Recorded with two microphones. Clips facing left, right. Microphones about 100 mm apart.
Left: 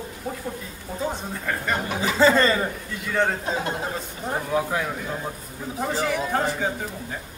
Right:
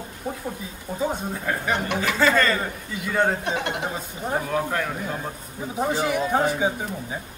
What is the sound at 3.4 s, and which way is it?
Speech, 70° right (ahead or behind).